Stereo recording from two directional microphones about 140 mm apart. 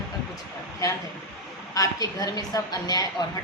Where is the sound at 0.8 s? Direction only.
25° left (ahead or behind).